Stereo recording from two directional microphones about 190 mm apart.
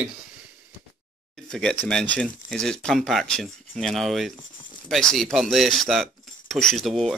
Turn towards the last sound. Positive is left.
turn(degrees=0)  # may be behind; listen again after turning